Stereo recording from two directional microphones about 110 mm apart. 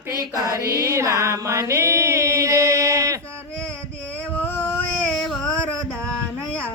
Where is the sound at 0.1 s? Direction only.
30° right (ahead or behind).